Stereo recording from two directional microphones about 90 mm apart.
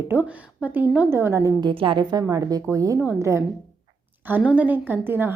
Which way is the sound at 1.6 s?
70° right (ahead or behind).